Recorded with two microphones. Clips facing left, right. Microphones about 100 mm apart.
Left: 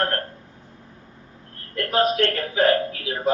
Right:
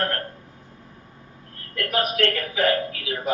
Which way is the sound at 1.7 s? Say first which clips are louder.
Left 4 dB; 30° left (ahead or behind).